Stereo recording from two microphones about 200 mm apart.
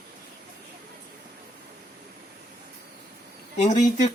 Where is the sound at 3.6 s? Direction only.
35° left (ahead or behind).